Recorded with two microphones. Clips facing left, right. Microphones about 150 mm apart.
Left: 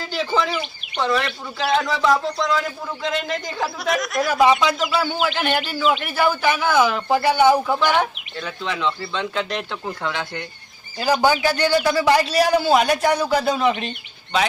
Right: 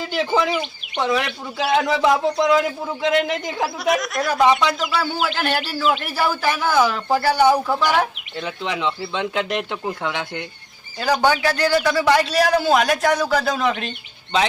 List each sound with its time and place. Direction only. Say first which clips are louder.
0.0 s speech: right 2 dB; 15° right (ahead or behind)
3.6 s a man's voice: right 2 dB; centre (ahead or behind)
8.4 s speech: right 1 dB; 20° right (ahead or behind)
11.0 s a man's voice: even; 5° left (ahead or behind)